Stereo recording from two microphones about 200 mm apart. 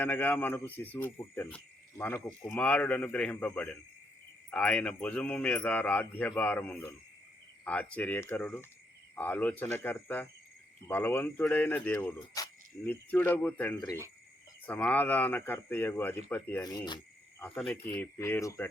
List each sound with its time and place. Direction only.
0.0 s speech: 10° left (ahead or behind)
14.7 s speech: 10° left (ahead or behind)